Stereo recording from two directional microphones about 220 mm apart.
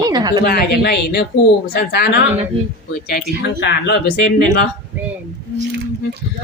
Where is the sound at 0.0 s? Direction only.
20° right (ahead or behind).